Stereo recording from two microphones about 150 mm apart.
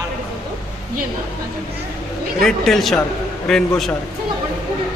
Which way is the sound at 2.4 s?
5° left (ahead or behind).